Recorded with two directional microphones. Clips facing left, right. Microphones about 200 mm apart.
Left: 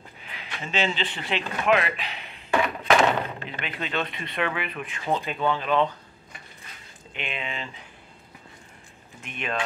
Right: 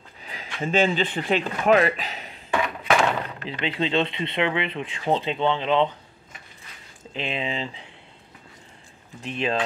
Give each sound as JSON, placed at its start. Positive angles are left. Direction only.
{"t": 0.2, "sound": "speech", "side_deg": -40}
{"t": 2.8, "sound": "thunk", "side_deg": 0}
{"t": 3.6, "sound": "speech", "side_deg": -25}
{"t": 7.2, "sound": "speech", "side_deg": -30}
{"t": 9.2, "sound": "speech", "side_deg": -30}